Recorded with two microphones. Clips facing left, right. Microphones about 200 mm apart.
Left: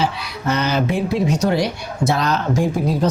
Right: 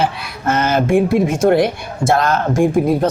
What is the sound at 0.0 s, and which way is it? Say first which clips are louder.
Speech: right 2 dB; 50° right (ahead or behind).